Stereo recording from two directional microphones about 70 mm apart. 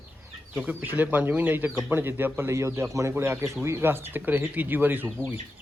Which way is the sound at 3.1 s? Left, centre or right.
Right.